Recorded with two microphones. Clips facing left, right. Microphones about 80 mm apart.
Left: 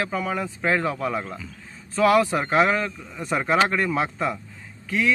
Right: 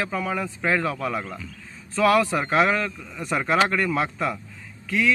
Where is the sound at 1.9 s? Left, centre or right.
Centre.